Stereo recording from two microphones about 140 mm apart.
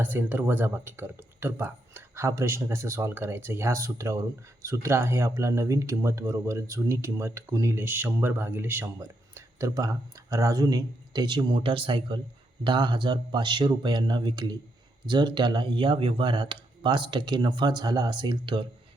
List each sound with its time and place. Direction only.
0.0 s speech: 15° right (ahead or behind); by 18.6 s 35° right (ahead or behind)